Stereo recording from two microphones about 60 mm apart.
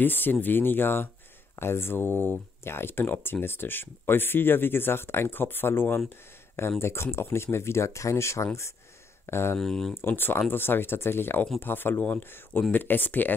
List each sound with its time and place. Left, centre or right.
0.0 s speech: left
9.6 s speech: centre
10.0 s speech: left